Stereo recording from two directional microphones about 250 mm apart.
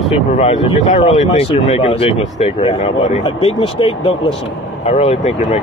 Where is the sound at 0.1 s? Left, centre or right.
Left.